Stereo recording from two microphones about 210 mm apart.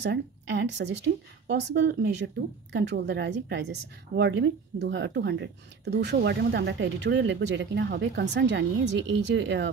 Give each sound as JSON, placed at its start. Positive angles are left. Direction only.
{"t": 0.0, "sound": "speech", "side_deg": -55}